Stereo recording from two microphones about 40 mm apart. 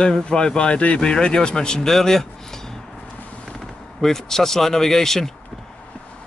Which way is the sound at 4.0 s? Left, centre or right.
Centre.